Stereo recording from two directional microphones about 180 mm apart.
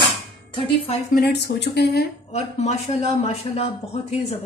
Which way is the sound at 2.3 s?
35° left (ahead or behind).